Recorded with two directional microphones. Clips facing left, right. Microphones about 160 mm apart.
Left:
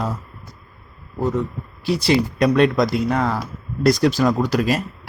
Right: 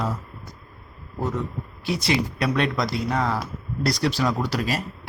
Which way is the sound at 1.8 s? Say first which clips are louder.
Left 6 dB; 30° left (ahead or behind).